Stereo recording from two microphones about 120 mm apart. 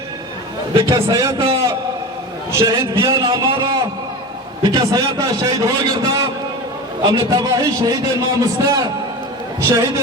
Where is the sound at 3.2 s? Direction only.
45° right (ahead or behind).